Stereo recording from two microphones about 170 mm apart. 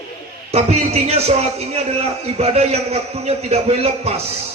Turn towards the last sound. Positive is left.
turn(degrees=-35)  # may be behind; listen again after turning